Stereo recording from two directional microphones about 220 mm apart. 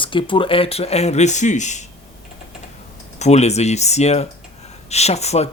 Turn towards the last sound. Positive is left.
turn(degrees=30)  # may be behind; listen again after turning